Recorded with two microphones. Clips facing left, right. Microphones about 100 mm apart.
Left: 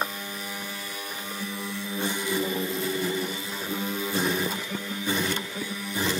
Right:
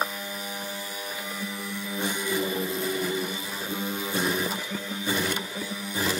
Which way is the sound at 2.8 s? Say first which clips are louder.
Even; 15° right (ahead or behind).